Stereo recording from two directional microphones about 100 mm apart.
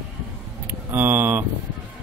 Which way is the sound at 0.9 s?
20° right (ahead or behind).